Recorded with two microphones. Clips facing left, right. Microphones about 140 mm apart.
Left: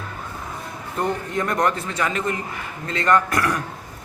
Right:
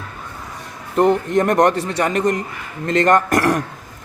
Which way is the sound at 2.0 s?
40° right (ahead or behind).